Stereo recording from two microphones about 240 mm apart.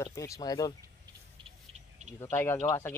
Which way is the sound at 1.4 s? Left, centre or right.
Right.